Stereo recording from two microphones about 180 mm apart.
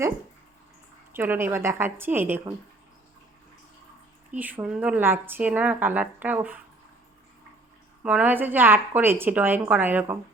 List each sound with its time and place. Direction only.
1.1 s speech: 10° right (ahead or behind)
4.3 s speech: 10° right (ahead or behind)
8.0 s speech: 10° right (ahead or behind)